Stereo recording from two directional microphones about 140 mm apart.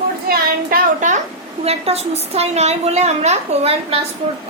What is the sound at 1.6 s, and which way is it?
A woman's voice, 50° right (ahead or behind).